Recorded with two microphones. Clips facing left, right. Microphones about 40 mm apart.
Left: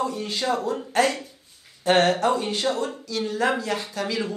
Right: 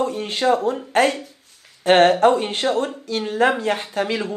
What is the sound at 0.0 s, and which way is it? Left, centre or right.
Speech, right.